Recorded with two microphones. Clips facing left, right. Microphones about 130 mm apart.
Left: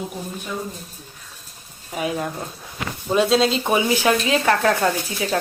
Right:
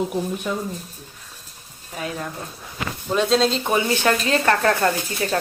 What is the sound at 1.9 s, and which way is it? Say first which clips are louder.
Speech: left 5 dB; 15° left (ahead or behind).